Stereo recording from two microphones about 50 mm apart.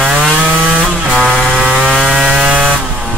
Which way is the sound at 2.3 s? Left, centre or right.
Right.